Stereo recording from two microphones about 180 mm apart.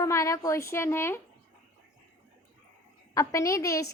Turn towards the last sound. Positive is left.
turn(degrees=15)  # may be behind; listen again after turning